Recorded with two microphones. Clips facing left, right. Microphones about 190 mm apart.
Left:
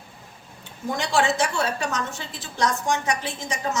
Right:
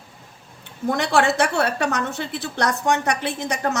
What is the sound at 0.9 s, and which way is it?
A woman's voice, 60° right (ahead or behind).